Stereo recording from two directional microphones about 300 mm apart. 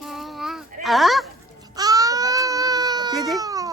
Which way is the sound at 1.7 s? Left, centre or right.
Centre.